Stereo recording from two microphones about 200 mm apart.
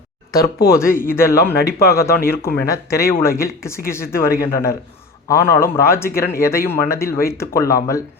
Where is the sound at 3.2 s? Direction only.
15° left (ahead or behind).